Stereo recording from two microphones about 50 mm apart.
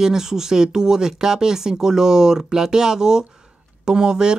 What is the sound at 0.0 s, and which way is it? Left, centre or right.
Speech, centre.